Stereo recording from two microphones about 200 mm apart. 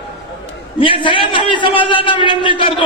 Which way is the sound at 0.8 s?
25° left (ahead or behind).